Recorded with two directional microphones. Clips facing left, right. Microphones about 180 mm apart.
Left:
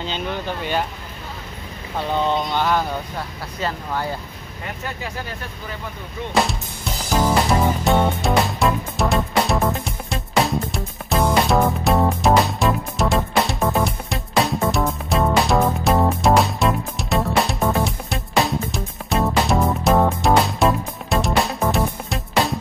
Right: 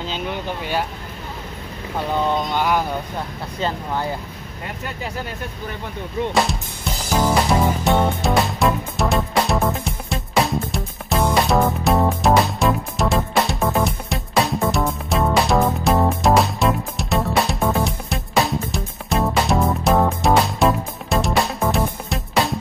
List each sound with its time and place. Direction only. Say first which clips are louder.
0.0 s speech: even; 5° right (ahead or behind)
2.1 s speech: even; 10° right (ahead or behind)
6.3 s music: left 5 dB; centre (ahead or behind)